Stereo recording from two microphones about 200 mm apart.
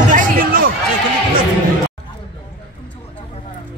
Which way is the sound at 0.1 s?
45° right (ahead or behind).